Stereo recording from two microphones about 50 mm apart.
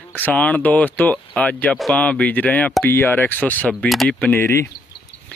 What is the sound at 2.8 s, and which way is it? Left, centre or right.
Speech, left.